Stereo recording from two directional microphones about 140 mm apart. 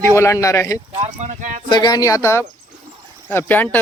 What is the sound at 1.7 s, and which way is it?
Speech, 30° left (ahead or behind).